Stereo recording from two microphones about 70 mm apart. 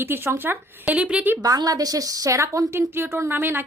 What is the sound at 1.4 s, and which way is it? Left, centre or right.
A woman's voice, right.